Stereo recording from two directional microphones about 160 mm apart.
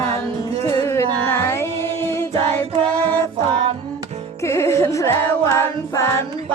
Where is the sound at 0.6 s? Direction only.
15° left (ahead or behind).